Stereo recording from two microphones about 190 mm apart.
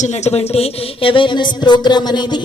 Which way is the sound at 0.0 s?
35° left (ahead or behind).